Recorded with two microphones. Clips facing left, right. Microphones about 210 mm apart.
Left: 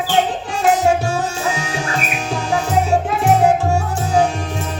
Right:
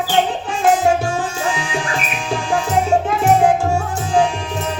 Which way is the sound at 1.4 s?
40° left (ahead or behind).